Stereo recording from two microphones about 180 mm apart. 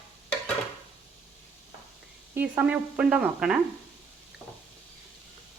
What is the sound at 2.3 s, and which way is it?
Speech, 10° right (ahead or behind).